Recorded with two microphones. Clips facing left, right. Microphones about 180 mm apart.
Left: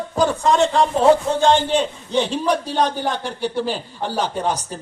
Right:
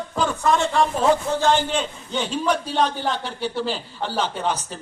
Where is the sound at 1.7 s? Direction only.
35° left (ahead or behind).